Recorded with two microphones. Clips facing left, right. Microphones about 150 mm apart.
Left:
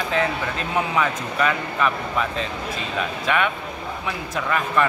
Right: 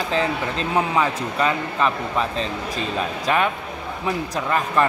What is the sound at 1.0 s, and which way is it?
A man's voice, 30° right (ahead or behind).